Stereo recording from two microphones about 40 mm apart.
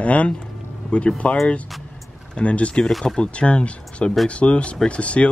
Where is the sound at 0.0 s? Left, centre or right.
Left.